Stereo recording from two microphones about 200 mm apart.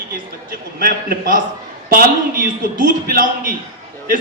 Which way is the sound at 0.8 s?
45° right (ahead or behind).